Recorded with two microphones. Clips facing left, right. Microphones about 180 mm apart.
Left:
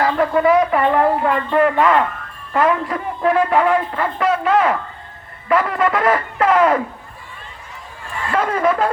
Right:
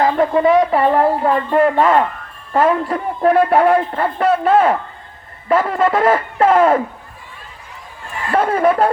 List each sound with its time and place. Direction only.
0.0 s a man's voice: 20° right (ahead or behind)
8.3 s speech: 30° right (ahead or behind)